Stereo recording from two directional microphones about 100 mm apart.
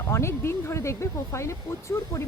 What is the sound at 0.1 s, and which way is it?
Speech, 25° left (ahead or behind).